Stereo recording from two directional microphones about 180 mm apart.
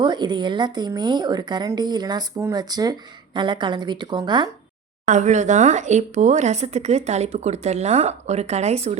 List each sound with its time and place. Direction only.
0.0 s a woman's voice: 25° right (ahead or behind)
5.0 s speech: 40° right (ahead or behind)